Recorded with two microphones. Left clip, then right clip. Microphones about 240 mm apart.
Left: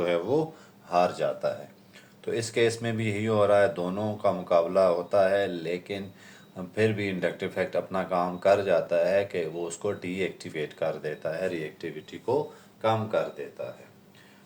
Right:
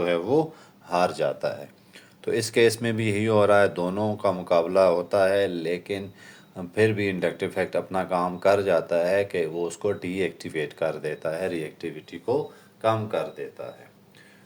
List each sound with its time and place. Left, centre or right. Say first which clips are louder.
0.0 s speech: right 3 dB; right
0.9 s speech: right 1 dB; right